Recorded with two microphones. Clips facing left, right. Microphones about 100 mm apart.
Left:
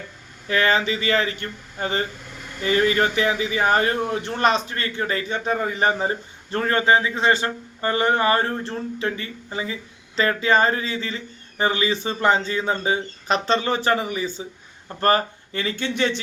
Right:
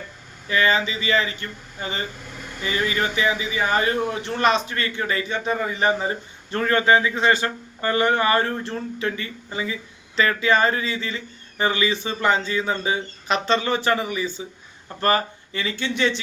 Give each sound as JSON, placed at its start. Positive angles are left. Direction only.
{"t": 0.4, "sound": "speech", "side_deg": 60}